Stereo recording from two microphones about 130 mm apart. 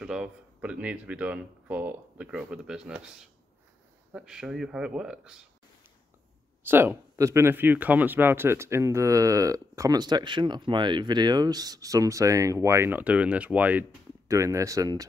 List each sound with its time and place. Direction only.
0.0 s speech: 5° right (ahead or behind)
4.1 s speech: 5° right (ahead or behind)
6.6 s speech: 15° right (ahead or behind)
14.2 s speech: 25° right (ahead or behind)